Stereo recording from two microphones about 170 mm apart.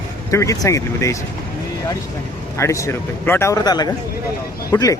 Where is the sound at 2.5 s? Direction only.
15° left (ahead or behind).